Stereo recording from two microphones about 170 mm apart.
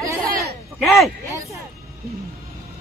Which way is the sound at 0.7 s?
Centre (ahead or behind).